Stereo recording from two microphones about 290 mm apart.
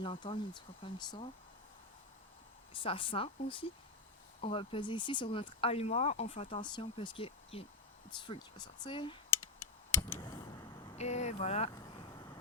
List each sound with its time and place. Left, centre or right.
0.0 s speech: centre
2.7 s speech: centre
10.2 s vehicle: centre